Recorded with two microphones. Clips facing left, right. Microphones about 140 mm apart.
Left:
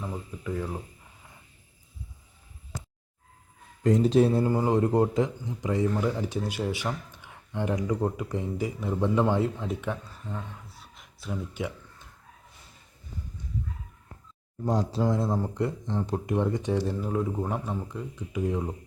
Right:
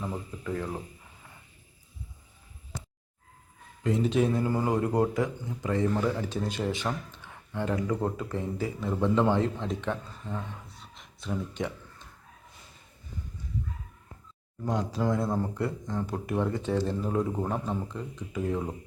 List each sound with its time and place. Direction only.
0.4 s speech: 10° left (ahead or behind)
3.8 s speech: 40° left (ahead or behind)
4.4 s a man's voice: 25° left (ahead or behind); by 11.7 s 5° left (ahead or behind)
14.7 s speech: 30° left (ahead or behind)
15.0 s speech: 20° left (ahead or behind)